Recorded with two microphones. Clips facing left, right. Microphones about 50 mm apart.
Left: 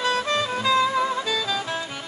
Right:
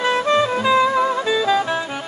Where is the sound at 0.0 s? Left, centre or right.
Right.